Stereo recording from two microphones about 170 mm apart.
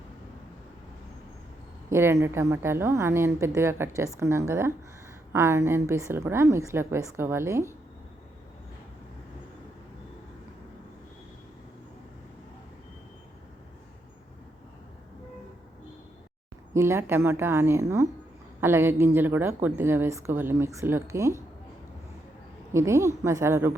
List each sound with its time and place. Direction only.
1.9 s a woman's voice: 15° right (ahead or behind)
16.7 s a woman's voice: 15° right (ahead or behind)
22.7 s a woman's voice: 15° right (ahead or behind)